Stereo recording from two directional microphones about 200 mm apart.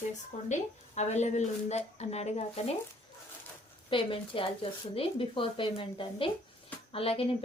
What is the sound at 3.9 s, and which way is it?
Speech, 25° left (ahead or behind).